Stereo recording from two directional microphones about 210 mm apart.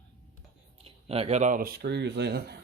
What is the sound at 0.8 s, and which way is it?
Speech, 30° right (ahead or behind).